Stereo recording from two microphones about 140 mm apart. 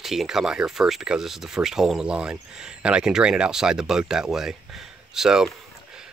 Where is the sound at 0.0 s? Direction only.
Centre (ahead or behind).